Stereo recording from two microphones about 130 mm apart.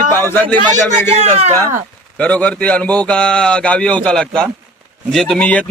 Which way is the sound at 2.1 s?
10° left (ahead or behind).